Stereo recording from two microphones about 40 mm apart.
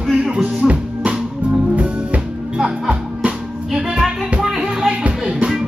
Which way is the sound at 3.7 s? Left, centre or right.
Centre.